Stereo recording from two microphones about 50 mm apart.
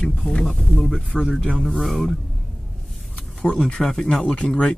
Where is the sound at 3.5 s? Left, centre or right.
Centre.